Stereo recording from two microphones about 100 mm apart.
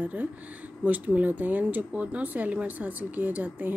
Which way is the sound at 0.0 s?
15° right (ahead or behind).